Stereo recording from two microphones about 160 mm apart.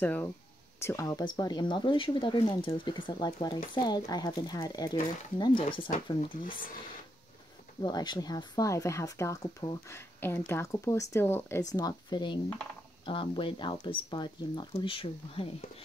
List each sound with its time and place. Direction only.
0.0 s speech: 10° left (ahead or behind); by 6.3 s 30° left (ahead or behind)
7.8 s speech: 25° left (ahead or behind)
11.7 s speech: 25° left (ahead or behind)